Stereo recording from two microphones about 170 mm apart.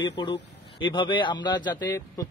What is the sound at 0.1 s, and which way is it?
Speech, 30° left (ahead or behind).